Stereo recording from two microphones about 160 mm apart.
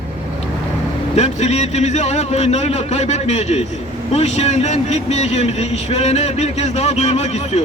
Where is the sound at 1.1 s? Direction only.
45° left (ahead or behind).